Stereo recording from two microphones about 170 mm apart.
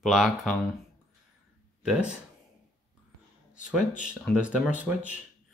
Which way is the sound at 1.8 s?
5° right (ahead or behind).